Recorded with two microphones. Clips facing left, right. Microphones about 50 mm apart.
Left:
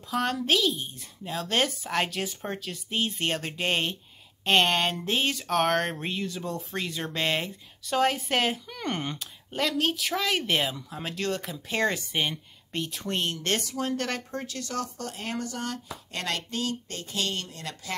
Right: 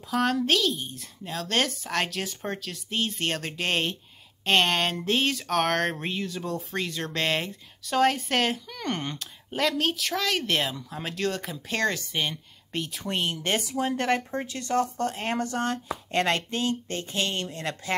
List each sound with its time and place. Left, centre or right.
0.0 s a woman's voice: centre
12.7 s speech: centre; by 17.9 s right